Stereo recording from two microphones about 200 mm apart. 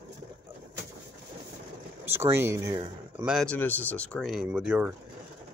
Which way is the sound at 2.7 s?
25° right (ahead or behind).